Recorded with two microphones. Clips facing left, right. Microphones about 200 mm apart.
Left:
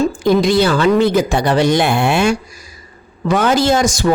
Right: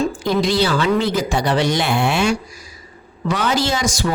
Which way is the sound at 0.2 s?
50° left (ahead or behind).